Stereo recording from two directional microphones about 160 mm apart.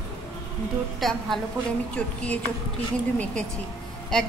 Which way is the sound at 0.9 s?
Centre (ahead or behind).